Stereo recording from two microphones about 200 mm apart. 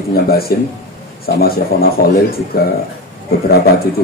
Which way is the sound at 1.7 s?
50° left (ahead or behind).